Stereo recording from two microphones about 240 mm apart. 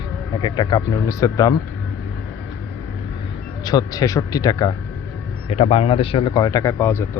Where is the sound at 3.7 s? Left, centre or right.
Centre.